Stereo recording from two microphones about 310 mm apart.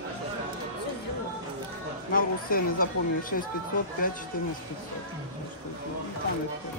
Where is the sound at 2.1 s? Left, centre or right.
Left.